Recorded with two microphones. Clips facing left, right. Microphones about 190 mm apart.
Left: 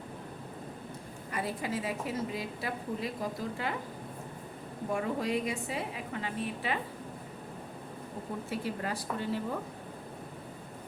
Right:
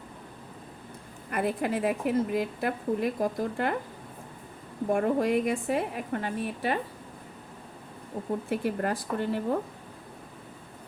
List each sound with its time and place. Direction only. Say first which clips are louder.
1.3 s a woman's voice: right 6 dB; 55° right (ahead or behind)
4.9 s a woman's voice: right 7 dB; 55° right (ahead or behind)
8.4 s a woman's voice: right 6 dB; 55° right (ahead or behind)